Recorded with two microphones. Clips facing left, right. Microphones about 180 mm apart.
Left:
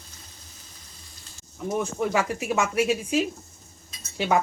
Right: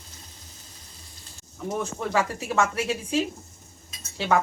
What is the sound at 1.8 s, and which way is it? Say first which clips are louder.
Speech: left 1 dB; 10° left (ahead or behind).